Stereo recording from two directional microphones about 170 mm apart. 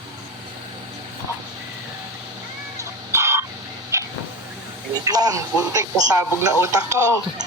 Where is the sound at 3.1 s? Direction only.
15° right (ahead or behind).